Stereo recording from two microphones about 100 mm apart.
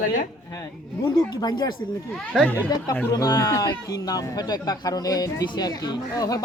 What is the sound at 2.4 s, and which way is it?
Speech, 15° left (ahead or behind).